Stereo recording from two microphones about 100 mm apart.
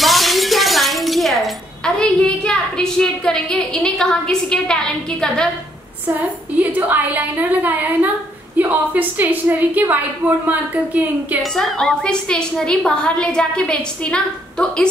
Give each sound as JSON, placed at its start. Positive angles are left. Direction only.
{"t": 0.0, "sound": "a sound", "side_deg": 0}
{"t": 6.6, "sound": "a woman's voice", "side_deg": -15}
{"t": 11.5, "sound": "a woman's voice", "side_deg": 5}